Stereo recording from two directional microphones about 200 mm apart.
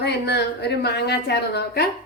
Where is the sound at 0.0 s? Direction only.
55° left (ahead or behind).